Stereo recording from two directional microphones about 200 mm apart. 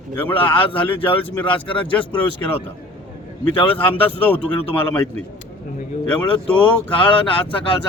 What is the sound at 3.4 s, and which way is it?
A man's voice, 10° left (ahead or behind).